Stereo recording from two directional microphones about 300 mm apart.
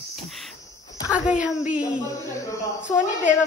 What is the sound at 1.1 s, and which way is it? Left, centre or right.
Speech, centre.